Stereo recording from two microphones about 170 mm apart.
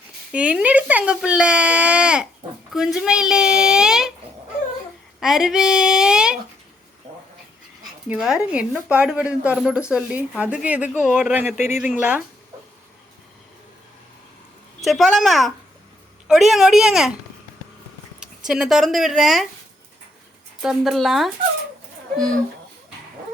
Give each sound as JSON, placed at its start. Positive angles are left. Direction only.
{"t": 0.3, "sound": "a woman's voice", "side_deg": -5}
{"t": 5.2, "sound": "a child's voice", "side_deg": -5}
{"t": 8.1, "sound": "a child's voice", "side_deg": -5}
{"t": 11.5, "sound": "speech", "side_deg": 40}
{"t": 11.8, "sound": "a woman's voice", "side_deg": -5}
{"t": 14.8, "sound": "a child's voice", "side_deg": 0}
{"t": 18.2, "sound": "speech", "side_deg": -5}
{"t": 20.6, "sound": "a child's voice", "side_deg": 0}